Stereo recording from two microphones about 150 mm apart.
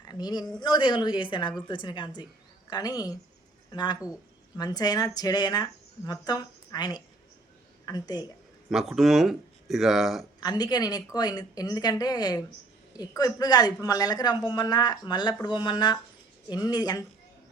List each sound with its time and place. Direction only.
0.0 s a woman's voice: 25° left (ahead or behind)
8.7 s speech: centre (ahead or behind)
10.4 s speech: 25° left (ahead or behind)